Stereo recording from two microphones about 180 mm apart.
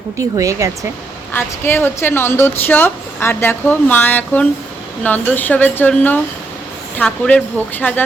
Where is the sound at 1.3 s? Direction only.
10° left (ahead or behind).